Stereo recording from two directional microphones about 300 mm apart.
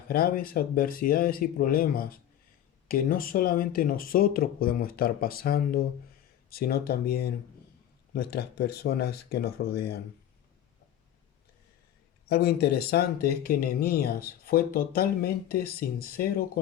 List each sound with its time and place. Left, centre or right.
0.1 s speech: left
12.3 s speech: left